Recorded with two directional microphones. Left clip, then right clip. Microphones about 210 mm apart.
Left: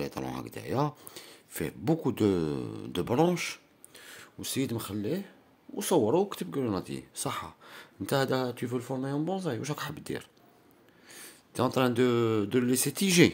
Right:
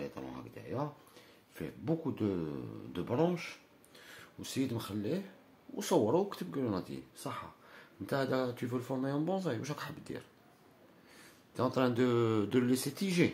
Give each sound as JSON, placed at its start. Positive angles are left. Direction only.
{"t": 0.0, "sound": "speech", "side_deg": 50}
{"t": 3.9, "sound": "speech", "side_deg": 35}